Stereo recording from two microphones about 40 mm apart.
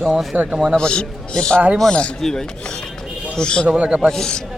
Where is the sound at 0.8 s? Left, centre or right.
Left.